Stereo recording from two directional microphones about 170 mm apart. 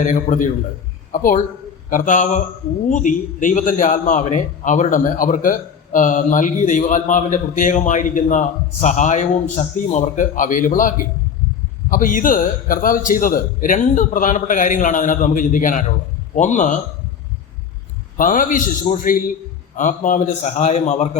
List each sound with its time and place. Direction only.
0.0 s a man's voice: 45° left (ahead or behind)
18.2 s a man's voice: 50° left (ahead or behind)